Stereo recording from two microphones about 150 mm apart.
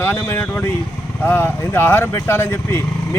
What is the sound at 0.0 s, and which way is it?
Speech, 15° left (ahead or behind).